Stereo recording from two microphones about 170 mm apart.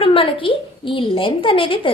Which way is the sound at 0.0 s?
30° left (ahead or behind).